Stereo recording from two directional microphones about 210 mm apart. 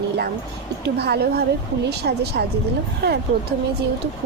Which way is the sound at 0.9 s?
50° right (ahead or behind).